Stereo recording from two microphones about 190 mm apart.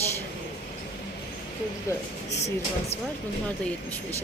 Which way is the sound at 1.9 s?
15° left (ahead or behind).